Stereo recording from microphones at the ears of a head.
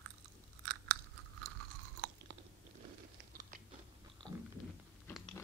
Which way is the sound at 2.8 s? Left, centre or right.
Right.